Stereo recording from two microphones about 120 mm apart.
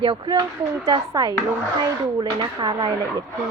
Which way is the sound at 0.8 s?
30° right (ahead or behind).